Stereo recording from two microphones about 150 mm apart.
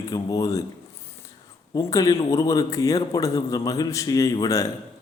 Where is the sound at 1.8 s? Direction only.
20° left (ahead or behind).